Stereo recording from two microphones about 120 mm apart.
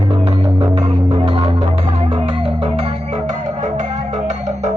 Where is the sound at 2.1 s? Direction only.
55° right (ahead or behind).